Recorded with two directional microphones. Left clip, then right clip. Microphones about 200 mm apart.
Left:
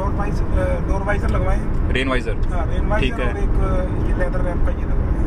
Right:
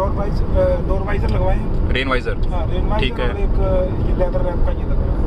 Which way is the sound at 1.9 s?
5° left (ahead or behind).